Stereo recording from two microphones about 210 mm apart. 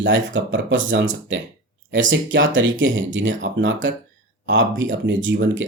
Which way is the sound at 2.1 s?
65° right (ahead or behind).